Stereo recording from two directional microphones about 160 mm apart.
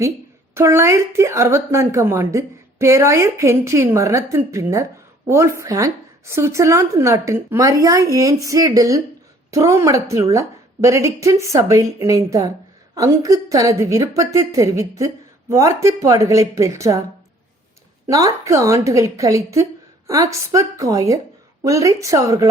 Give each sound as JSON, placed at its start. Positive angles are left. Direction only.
{"t": 0.5, "sound": "a woman's voice", "side_deg": -15}
{"t": 18.0, "sound": "a woman's voice", "side_deg": -20}